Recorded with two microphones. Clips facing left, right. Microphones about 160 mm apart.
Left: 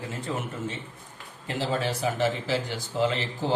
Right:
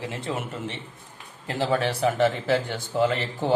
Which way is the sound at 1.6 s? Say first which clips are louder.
Right 4 dB; 65° right (ahead or behind).